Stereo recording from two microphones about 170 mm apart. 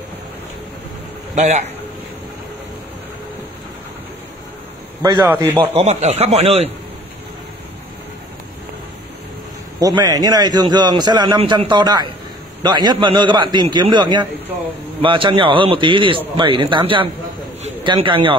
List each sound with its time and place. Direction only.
1.3 s a man's voice: 45° right (ahead or behind)
5.2 s a man's voice: 10° right (ahead or behind)
5.6 s speech: 40° right (ahead or behind)
9.8 s a man's voice: 20° right (ahead or behind)